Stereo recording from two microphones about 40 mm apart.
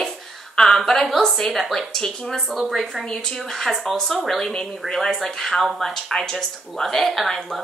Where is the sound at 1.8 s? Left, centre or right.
Centre.